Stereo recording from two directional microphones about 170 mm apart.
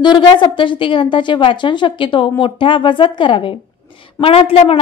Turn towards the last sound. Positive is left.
turn(degrees=35)  # may be behind; listen again after turning